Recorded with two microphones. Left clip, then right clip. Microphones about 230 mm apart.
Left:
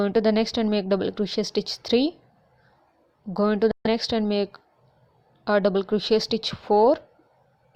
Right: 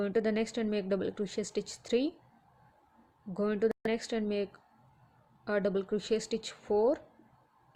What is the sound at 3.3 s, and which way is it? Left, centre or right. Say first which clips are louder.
Speech: left 9 dB; left.